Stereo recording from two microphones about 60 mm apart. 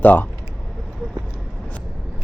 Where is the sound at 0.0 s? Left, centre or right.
Left.